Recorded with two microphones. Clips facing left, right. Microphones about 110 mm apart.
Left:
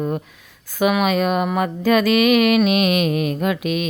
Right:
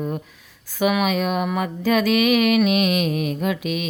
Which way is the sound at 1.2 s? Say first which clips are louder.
Left 3 dB; 60° left (ahead or behind).